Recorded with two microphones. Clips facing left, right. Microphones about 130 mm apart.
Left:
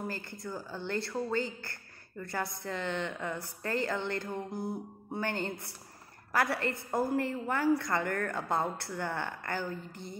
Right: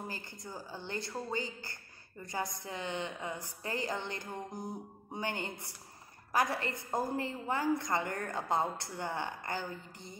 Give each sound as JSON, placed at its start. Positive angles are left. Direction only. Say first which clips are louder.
{"t": 0.1, "sound": "a woman's voice", "louder": "left 5 dB", "side_deg": -15}